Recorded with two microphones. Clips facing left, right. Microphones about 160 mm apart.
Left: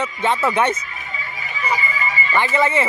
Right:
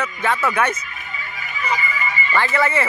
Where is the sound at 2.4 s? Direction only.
20° left (ahead or behind).